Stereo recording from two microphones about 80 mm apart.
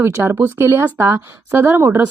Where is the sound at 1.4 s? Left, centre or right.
Right.